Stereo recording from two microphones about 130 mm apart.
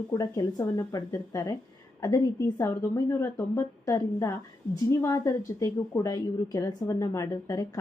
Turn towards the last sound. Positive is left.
turn(degrees=25)  # may be behind; listen again after turning